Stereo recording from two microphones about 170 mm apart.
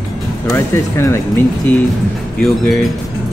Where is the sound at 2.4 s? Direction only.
Centre (ahead or behind).